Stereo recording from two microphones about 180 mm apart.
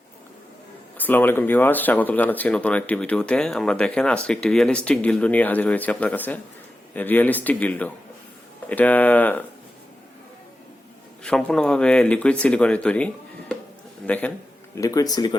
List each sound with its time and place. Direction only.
0.9 s speech: 10° left (ahead or behind)
11.2 s speech: 5° left (ahead or behind)
14.1 s speech: 5° left (ahead or behind)
14.8 s speech: 20° left (ahead or behind)